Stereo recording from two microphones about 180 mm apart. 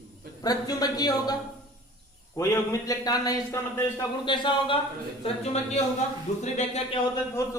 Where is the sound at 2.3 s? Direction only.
15° left (ahead or behind).